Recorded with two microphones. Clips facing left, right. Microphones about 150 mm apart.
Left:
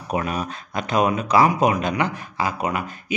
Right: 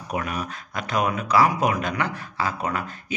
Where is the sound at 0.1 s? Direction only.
25° left (ahead or behind).